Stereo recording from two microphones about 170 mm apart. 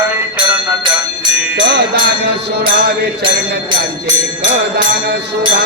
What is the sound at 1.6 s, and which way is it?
Music, 80° right.